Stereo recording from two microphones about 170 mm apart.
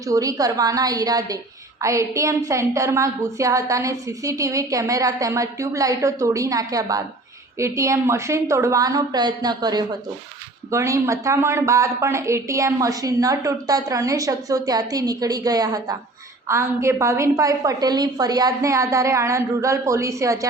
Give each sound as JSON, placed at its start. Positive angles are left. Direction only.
{"t": 0.0, "sound": "a woman's voice", "side_deg": -20}